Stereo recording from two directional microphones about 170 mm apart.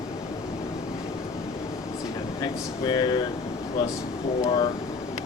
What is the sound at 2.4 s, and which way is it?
Air conditioning, 25° left (ahead or behind).